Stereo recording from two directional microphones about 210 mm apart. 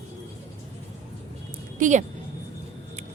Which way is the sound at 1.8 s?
35° right (ahead or behind).